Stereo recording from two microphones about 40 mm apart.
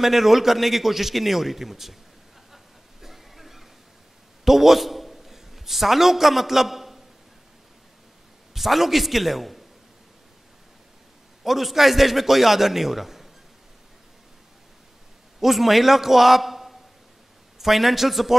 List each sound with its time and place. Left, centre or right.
0.0 s a man's voice: centre
2.5 s a sound: centre
4.5 s a man's voice: centre
8.5 s a man's voice: centre
11.4 s a man's voice: centre
15.4 s a man's voice: centre